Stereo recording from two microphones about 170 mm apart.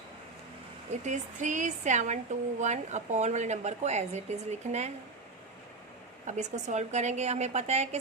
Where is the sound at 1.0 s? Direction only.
45° right (ahead or behind).